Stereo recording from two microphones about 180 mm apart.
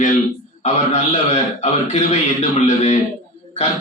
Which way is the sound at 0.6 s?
40° left (ahead or behind).